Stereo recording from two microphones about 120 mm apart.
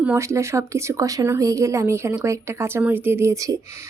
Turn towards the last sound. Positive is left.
turn(degrees=-30)  # may be behind; listen again after turning